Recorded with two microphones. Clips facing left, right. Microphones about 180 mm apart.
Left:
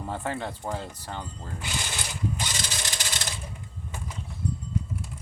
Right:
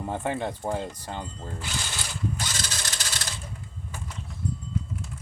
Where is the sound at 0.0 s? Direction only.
15° right (ahead or behind).